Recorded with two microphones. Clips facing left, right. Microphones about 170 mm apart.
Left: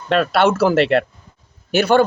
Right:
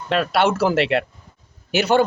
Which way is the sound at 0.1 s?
10° right (ahead or behind).